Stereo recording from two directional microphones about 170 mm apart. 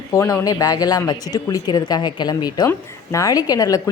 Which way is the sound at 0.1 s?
20° left (ahead or behind).